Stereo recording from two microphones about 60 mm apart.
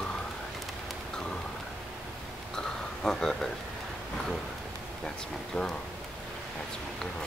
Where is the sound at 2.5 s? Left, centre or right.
Centre.